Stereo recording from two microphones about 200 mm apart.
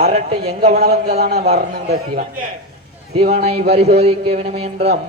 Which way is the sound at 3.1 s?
35° right (ahead or behind).